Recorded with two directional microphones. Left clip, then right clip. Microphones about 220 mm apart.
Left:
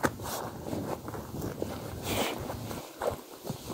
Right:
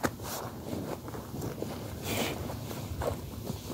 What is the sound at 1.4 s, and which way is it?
Walk, 10° left (ahead or behind).